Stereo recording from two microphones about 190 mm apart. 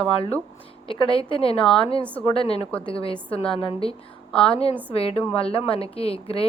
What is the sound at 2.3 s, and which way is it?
A woman's voice, 30° left (ahead or behind).